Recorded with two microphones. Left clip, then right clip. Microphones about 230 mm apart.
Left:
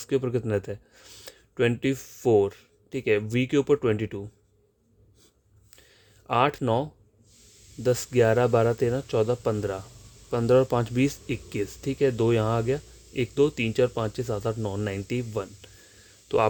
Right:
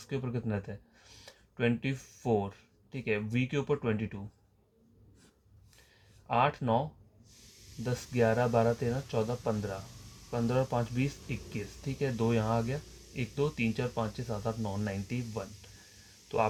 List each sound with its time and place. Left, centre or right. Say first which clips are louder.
0.0 s speech: left 11 dB; left
6.2 s speech: left 5 dB; left
7.9 s speech: left 8 dB; left